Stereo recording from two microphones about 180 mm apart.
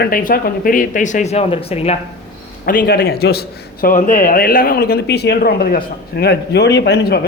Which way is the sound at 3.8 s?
50° left (ahead or behind).